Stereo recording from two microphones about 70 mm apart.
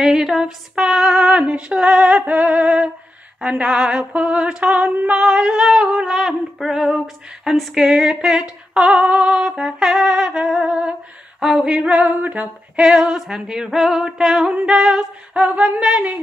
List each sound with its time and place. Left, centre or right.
0.0 s female singing: centre